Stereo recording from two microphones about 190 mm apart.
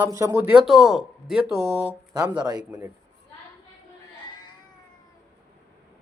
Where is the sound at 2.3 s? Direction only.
20° right (ahead or behind).